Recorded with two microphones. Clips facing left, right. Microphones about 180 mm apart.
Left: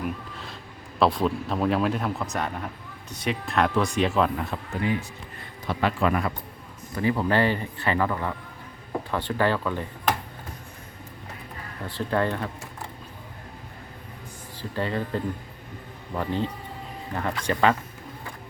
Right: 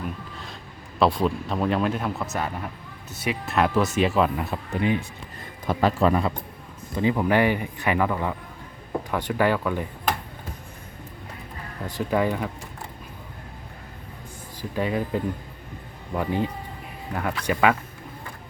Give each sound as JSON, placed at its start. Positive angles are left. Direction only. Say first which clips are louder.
{"t": 0.9, "sound": "speech", "louder": "right 1 dB", "side_deg": 0}
{"t": 4.7, "sound": "speech", "louder": "right 3 dB", "side_deg": -20}
{"t": 5.6, "sound": "speech", "louder": "right 3 dB", "side_deg": -40}
{"t": 6.9, "sound": "speech", "louder": "right 2 dB", "side_deg": -20}
{"t": 11.9, "sound": "speech", "louder": "right 2 dB", "side_deg": -10}
{"t": 14.6, "sound": "speech", "louder": "right 2 dB", "side_deg": -10}